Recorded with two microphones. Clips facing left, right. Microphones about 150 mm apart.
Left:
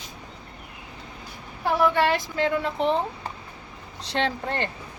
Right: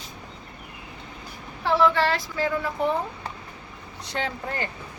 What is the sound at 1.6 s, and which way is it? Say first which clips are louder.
A woman's voice: even; 15° left (ahead or behind).